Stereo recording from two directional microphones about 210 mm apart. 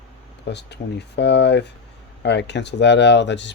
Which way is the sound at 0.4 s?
55° left (ahead or behind).